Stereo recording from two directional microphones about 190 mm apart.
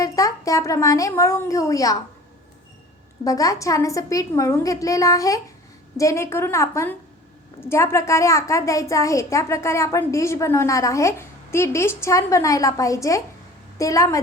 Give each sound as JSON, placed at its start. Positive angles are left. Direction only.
{"t": 0.0, "sound": "a woman's voice", "side_deg": 15}
{"t": 3.2, "sound": "a child's voice", "side_deg": 20}